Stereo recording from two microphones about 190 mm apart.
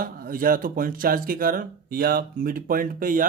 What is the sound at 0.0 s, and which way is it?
Speech, 50° right (ahead or behind).